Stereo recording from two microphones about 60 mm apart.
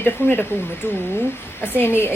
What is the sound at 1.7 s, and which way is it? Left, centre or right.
Speech, left.